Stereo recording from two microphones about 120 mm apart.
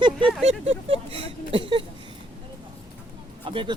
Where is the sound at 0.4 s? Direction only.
65° right (ahead or behind).